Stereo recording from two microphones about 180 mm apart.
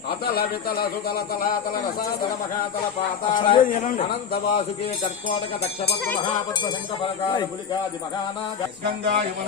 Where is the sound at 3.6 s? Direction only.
45° left (ahead or behind).